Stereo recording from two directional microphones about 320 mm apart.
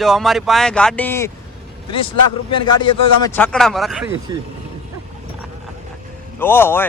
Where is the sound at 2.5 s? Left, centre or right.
Centre.